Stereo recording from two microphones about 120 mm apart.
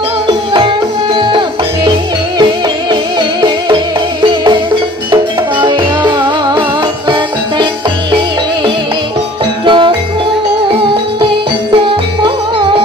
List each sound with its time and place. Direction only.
0.3 s music: 40° right (ahead or behind)
9.7 s music: 40° right (ahead or behind)
11.7 s music: 45° right (ahead or behind)